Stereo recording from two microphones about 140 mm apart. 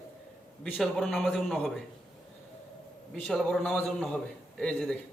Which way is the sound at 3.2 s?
5° left (ahead or behind).